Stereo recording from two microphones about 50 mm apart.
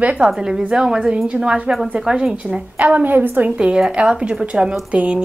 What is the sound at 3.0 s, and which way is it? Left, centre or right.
Speech, right.